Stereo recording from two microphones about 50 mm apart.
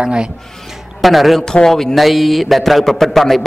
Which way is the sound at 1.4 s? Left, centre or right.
Centre.